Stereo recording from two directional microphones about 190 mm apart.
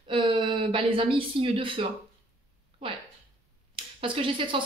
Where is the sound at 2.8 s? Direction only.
30° right (ahead or behind).